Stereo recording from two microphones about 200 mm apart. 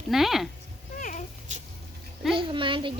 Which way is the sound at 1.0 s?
40° left (ahead or behind).